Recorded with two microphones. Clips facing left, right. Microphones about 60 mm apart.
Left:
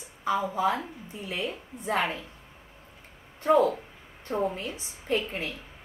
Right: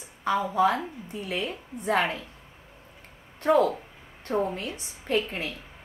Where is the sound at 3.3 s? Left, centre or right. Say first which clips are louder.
Even; right.